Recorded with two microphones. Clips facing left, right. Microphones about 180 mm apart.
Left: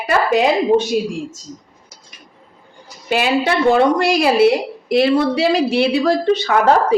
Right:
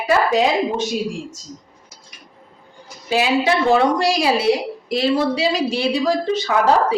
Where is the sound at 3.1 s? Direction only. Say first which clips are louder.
Left 1 dB; 60° left (ahead or behind).